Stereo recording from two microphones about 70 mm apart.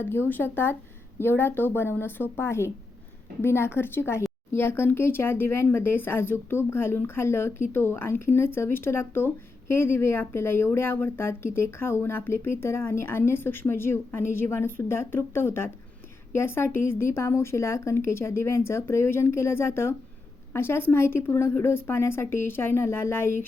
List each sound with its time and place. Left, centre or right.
0.0 s speech: left